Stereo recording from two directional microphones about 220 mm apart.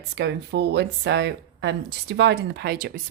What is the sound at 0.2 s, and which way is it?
Speech, 50° right (ahead or behind).